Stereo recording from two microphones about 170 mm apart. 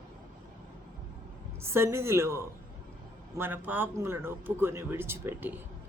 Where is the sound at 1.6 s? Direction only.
15° right (ahead or behind).